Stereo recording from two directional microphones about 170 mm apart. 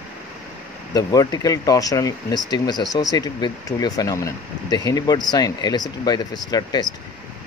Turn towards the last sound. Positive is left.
turn(degrees=25)  # may be behind; listen again after turning